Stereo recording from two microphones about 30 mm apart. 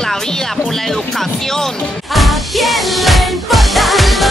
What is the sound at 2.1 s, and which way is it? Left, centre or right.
Music, centre.